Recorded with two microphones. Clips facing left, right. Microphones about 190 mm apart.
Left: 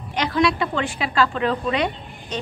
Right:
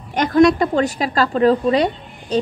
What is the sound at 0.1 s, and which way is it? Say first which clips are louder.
A woman's voice: right 8 dB; 45° right (ahead or behind).